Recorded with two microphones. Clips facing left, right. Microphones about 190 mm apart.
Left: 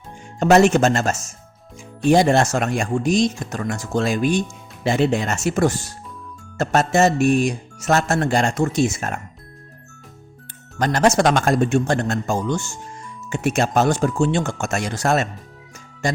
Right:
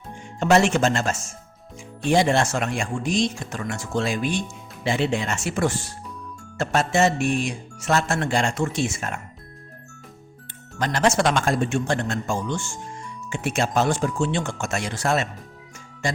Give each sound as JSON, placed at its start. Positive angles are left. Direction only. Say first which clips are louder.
{"t": 0.3, "sound": "speech", "louder": "left 5 dB", "side_deg": 40}
{"t": 10.8, "sound": "speech", "louder": "left 4 dB", "side_deg": 45}